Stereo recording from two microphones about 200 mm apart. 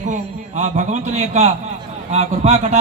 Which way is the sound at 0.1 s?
35° right (ahead or behind).